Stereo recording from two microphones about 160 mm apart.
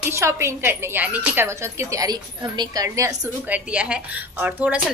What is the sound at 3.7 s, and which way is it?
A woman's voice, 5° right (ahead or behind).